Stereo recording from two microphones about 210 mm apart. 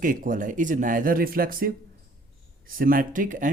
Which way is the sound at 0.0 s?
40° right (ahead or behind).